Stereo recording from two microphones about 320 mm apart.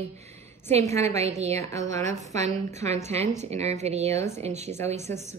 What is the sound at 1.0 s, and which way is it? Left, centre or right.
Speech, centre.